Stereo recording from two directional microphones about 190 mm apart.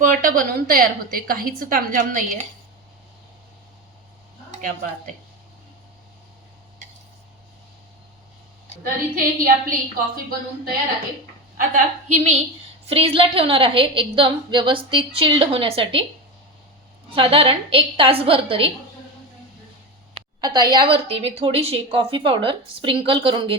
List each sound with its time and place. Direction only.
0.0 s speech: 45° right (ahead or behind)
8.8 s speech: 50° right (ahead or behind)
11.5 s a woman's voice: 40° right (ahead or behind)
12.9 s a woman's voice: 30° right (ahead or behind)
17.2 s a woman's voice: 30° right (ahead or behind)
20.4 s a woman's voice: 20° right (ahead or behind)